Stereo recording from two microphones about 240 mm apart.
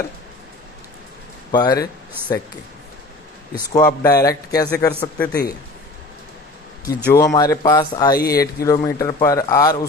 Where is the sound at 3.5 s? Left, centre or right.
Centre.